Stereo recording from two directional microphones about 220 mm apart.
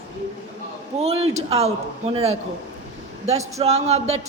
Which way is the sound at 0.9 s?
30° right (ahead or behind).